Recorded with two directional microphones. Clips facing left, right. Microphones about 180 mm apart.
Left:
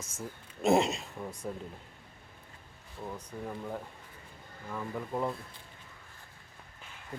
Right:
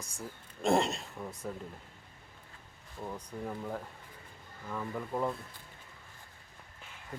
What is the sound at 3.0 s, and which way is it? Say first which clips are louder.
Speech: even; 5° right (ahead or behind).